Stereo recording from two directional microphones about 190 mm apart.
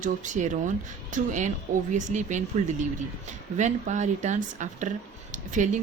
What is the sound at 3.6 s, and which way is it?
A woman's voice, 40° right (ahead or behind).